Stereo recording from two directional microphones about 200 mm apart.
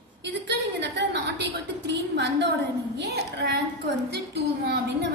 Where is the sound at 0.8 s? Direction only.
60° right (ahead or behind).